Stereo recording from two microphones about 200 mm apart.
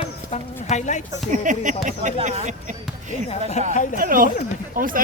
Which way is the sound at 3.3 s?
30° left (ahead or behind).